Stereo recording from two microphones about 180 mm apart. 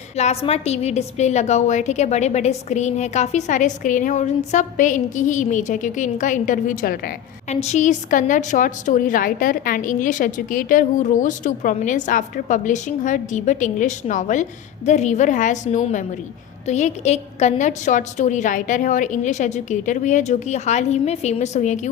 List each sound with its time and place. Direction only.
0.2 s a woman's voice: 35° left (ahead or behind); by 7.1 s 55° left (ahead or behind)
7.5 s a woman's voice: 40° left (ahead or behind)